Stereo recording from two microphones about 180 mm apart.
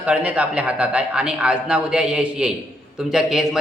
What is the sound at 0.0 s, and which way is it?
A man's voice, 5° right (ahead or behind).